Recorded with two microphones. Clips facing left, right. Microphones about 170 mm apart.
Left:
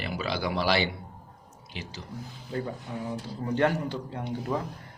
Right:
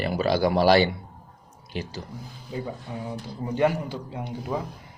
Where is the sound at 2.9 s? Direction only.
15° right (ahead or behind).